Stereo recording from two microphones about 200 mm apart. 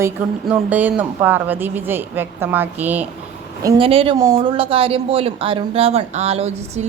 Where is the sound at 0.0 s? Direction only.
5° right (ahead or behind).